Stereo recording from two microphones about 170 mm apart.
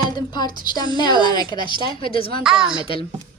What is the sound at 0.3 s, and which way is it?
A woman's voice, 25° left (ahead or behind).